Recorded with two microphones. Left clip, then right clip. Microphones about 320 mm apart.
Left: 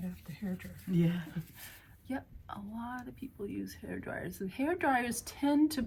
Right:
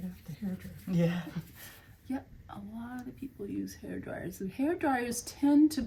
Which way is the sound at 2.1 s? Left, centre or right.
Centre.